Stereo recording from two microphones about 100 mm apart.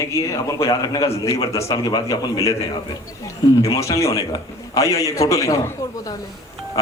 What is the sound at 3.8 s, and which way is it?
Speech, 30° left (ahead or behind).